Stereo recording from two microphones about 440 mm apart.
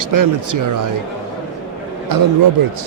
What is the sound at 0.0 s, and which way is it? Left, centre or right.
Speech, right.